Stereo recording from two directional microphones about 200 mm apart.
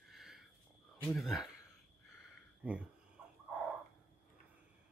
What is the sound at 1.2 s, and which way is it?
Speech, centre (ahead or behind).